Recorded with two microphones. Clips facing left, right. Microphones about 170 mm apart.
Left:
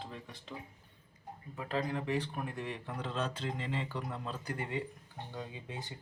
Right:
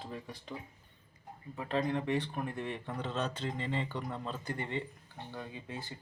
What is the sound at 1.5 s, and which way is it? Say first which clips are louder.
Speech: right 3 dB; 5° left (ahead or behind).